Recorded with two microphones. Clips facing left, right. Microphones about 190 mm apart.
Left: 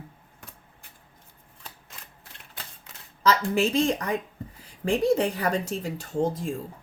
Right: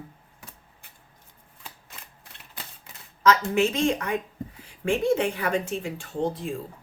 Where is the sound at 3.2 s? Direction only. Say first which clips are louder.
Right 2 dB; 35° left (ahead or behind).